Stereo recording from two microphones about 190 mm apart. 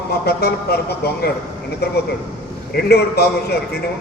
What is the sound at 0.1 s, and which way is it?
A man's voice, 55° left (ahead or behind).